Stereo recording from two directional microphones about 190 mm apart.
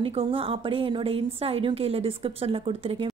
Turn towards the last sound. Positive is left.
turn(degrees=-30)  # may be behind; listen again after turning